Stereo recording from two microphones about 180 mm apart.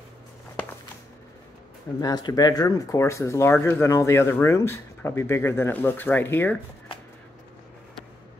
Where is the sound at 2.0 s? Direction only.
20° left (ahead or behind).